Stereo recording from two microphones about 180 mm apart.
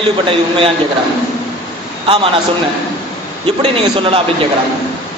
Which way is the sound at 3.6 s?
30° right (ahead or behind).